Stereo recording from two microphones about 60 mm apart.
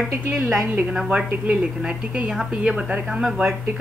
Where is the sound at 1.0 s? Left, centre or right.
Centre.